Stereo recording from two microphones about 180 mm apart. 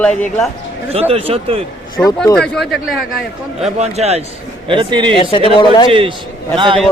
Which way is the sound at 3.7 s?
35° right (ahead or behind).